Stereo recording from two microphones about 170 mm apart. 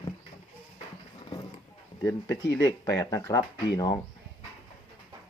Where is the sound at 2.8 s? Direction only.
20° left (ahead or behind).